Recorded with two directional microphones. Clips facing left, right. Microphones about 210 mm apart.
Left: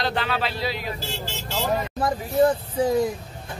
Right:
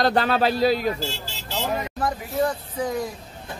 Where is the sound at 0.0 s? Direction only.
40° right (ahead or behind).